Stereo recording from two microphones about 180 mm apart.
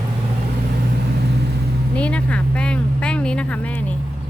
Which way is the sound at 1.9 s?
5° left (ahead or behind).